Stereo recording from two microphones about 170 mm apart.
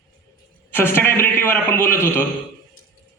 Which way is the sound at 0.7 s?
15° left (ahead or behind).